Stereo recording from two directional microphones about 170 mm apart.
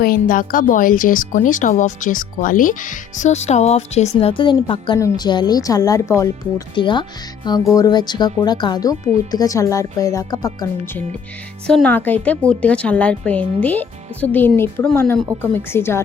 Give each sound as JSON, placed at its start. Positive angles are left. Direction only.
{"t": 0.0, "sound": "speech", "side_deg": 55}
{"t": 11.6, "sound": "speech", "side_deg": 5}